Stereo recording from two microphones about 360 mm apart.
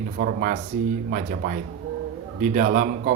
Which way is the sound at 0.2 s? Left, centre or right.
Right.